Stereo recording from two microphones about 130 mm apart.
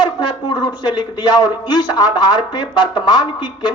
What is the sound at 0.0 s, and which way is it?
A man's voice, 35° left (ahead or behind).